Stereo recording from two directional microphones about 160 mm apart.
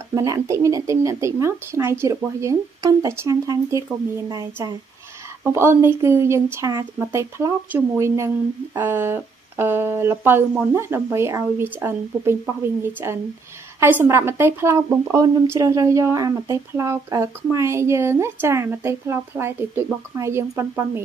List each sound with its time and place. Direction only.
0.1 s a woman's voice: 20° right (ahead or behind)